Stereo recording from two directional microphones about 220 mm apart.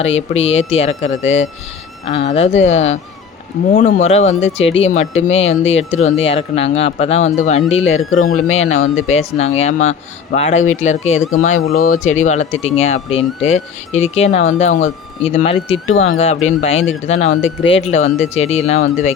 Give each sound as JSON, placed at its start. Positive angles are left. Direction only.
{"t": 0.0, "sound": "speech", "side_deg": 30}
{"t": 1.2, "sound": "speech", "side_deg": 60}
{"t": 2.1, "sound": "speech", "side_deg": 30}
{"t": 8.2, "sound": "speech", "side_deg": 70}
{"t": 8.5, "sound": "speech", "side_deg": 30}